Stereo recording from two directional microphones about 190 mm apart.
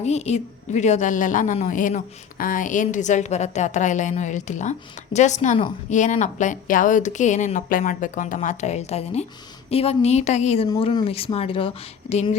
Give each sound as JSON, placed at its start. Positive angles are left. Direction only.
{"t": 0.0, "sound": "a woman's voice", "side_deg": 35}
{"t": 10.7, "sound": "speech", "side_deg": 25}